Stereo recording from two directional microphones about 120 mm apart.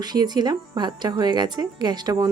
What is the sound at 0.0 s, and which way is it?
Speech, 35° right (ahead or behind).